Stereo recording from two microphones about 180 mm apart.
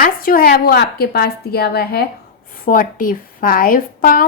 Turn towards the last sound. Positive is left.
turn(degrees=50)  # may be behind; listen again after turning